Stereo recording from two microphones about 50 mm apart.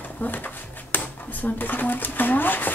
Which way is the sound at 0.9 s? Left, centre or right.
Left.